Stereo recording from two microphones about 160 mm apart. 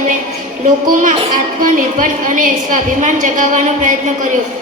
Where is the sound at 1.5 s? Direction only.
55° right (ahead or behind).